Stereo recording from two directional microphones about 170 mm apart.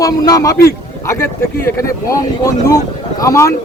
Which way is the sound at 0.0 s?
20° left (ahead or behind).